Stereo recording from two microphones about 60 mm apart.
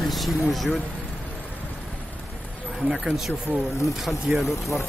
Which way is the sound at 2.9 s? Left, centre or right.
Centre.